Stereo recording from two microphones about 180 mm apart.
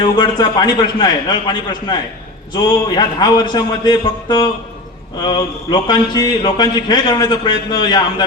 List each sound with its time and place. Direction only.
0.0 s speech: 25° left (ahead or behind)